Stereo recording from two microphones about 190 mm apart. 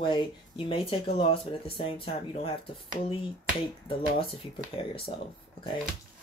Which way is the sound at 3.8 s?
25° left (ahead or behind).